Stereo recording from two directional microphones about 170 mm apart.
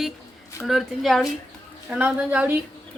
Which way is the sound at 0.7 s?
Centre (ahead or behind).